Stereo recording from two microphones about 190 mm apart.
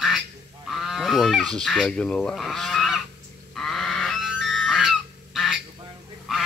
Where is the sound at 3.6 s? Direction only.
Centre (ahead or behind).